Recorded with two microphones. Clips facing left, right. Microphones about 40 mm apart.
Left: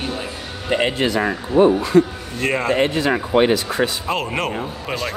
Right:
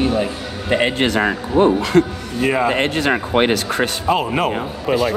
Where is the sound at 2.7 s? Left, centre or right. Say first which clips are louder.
Even; right.